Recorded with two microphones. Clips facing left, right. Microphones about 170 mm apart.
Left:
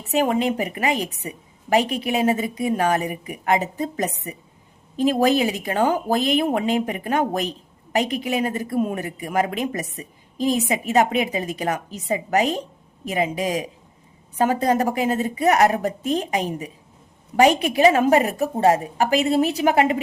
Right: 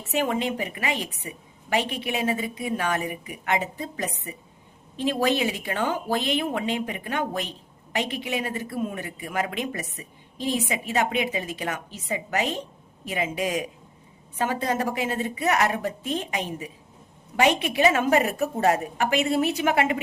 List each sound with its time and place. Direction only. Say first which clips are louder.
0.0 s a woman's voice: left 5 dB; 40° left (ahead or behind)